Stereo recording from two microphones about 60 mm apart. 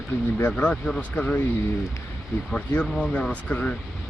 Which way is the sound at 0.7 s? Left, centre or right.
Centre.